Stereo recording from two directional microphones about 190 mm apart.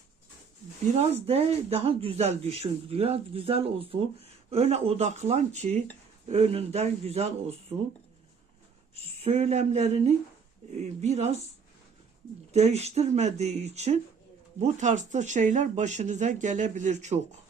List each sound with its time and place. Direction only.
1.3 s speech: 30° right (ahead or behind)
9.2 s speech: 35° right (ahead or behind)
12.5 s speech: 35° right (ahead or behind)